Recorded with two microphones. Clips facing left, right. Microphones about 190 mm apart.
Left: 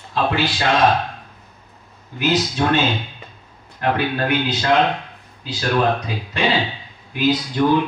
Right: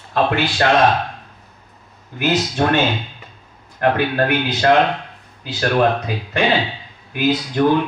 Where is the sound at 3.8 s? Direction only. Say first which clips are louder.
Right 3 dB; 55° right (ahead or behind).